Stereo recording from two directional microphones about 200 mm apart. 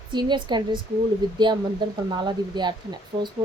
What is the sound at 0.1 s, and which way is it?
Speech, 25° right (ahead or behind).